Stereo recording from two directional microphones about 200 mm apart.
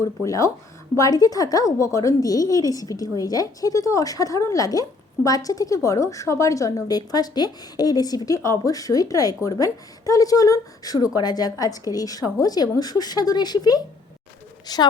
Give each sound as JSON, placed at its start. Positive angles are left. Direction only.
{"t": 0.0, "sound": "a woman's voice", "side_deg": 15}